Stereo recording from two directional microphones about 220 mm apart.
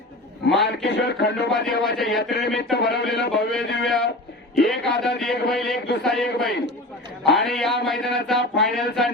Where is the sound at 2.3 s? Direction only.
50° left (ahead or behind).